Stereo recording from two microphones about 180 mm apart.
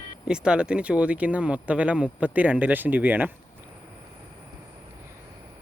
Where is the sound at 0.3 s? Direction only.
5° right (ahead or behind).